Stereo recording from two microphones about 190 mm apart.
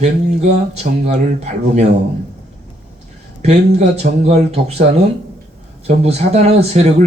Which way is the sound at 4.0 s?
35° right (ahead or behind).